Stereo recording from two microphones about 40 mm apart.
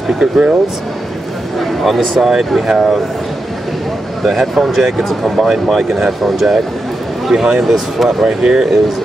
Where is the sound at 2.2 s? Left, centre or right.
Centre.